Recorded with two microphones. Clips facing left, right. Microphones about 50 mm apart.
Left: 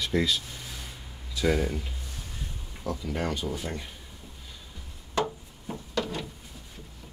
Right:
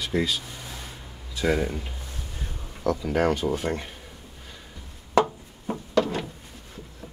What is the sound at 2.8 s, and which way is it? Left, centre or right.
Speech, right.